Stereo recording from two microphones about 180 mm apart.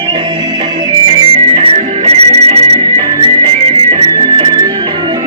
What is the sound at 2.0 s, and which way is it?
Music, 35° right (ahead or behind).